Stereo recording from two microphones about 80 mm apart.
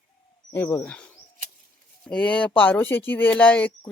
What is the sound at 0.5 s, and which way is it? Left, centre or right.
Speech, left.